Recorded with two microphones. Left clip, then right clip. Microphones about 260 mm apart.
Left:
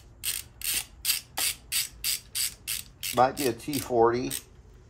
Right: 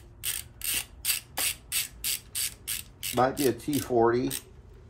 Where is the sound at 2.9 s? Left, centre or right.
Centre.